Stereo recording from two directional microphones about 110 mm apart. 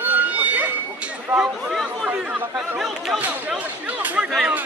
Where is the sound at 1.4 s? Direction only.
5° right (ahead or behind).